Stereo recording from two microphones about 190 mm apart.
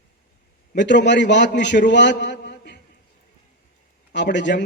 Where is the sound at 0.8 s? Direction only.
65° left (ahead or behind).